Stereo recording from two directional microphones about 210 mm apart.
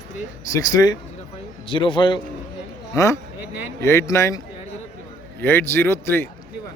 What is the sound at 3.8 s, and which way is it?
Speech, 15° left (ahead or behind).